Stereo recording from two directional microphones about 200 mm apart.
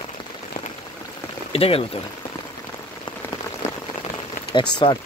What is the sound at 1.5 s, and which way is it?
Speech, 30° left (ahead or behind).